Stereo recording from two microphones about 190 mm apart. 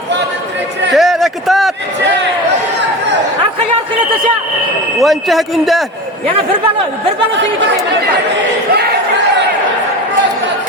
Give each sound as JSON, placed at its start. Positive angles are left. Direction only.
{"t": 0.9, "sound": "a sound", "side_deg": 0}
{"t": 4.9, "sound": "speech", "side_deg": 0}
{"t": 8.7, "sound": "crowd", "side_deg": -60}